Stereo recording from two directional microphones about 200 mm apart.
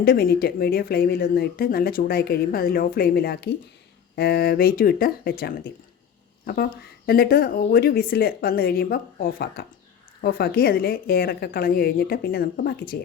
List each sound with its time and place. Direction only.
0.0 s speech: 50° left (ahead or behind)